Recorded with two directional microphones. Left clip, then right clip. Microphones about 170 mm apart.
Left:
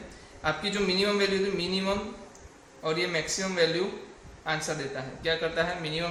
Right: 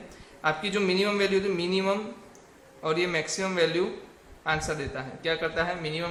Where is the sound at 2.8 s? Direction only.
40° right (ahead or behind).